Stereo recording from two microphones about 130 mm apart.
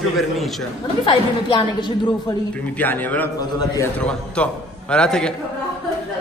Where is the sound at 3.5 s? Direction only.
25° left (ahead or behind).